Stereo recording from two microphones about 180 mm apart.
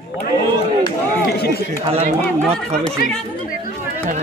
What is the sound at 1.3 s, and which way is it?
Speech, 60° left (ahead or behind).